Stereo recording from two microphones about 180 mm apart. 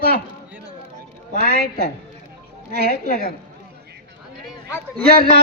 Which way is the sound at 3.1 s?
60° left (ahead or behind).